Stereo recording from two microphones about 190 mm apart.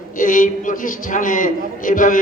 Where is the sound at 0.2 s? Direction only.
45° left (ahead or behind).